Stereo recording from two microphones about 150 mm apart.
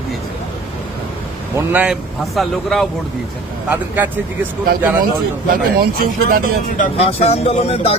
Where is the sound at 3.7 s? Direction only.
10° right (ahead or behind).